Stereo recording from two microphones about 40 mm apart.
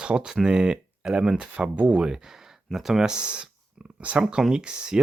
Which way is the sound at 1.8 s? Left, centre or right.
Right.